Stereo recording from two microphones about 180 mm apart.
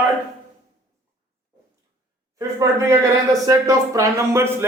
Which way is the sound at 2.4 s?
20° right (ahead or behind).